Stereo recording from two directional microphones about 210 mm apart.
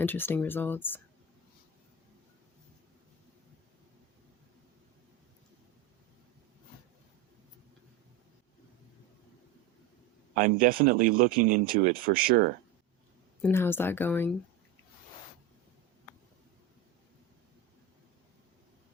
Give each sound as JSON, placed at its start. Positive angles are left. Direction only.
{"t": 0.0, "sound": "speech", "side_deg": 10}
{"t": 10.3, "sound": "speech", "side_deg": -40}
{"t": 13.4, "sound": "speech", "side_deg": 10}